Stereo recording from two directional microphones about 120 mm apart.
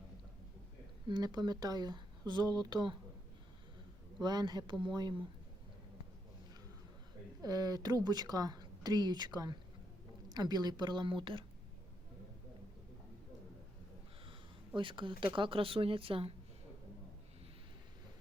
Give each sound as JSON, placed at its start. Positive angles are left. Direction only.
{"t": 1.0, "sound": "speech", "side_deg": -35}
{"t": 4.2, "sound": "speech", "side_deg": -35}
{"t": 7.4, "sound": "speech", "side_deg": -30}
{"t": 14.8, "sound": "speech", "side_deg": -45}